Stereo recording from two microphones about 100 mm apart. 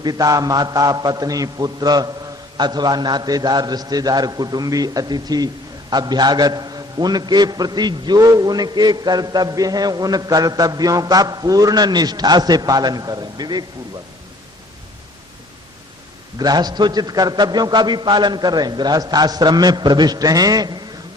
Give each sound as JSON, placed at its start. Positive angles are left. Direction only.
{"t": 0.0, "sound": "a man's voice", "side_deg": -40}
{"t": 16.4, "sound": "a man's voice", "side_deg": -40}